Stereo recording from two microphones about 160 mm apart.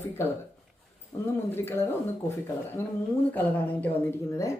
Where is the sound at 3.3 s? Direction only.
10° left (ahead or behind).